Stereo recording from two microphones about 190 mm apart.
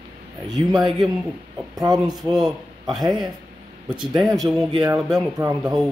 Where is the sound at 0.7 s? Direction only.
Centre (ahead or behind).